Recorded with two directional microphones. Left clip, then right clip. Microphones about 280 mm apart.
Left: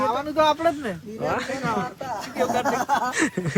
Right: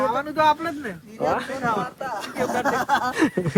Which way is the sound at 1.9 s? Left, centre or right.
Right.